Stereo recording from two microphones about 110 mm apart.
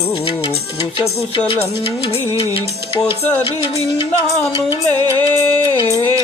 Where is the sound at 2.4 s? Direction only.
55° left (ahead or behind).